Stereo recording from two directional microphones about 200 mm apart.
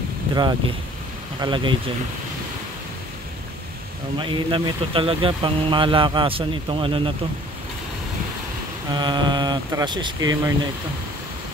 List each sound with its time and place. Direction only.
0.3 s speech: 20° right (ahead or behind)
4.2 s speech: 25° right (ahead or behind)
8.9 s speech: 20° right (ahead or behind)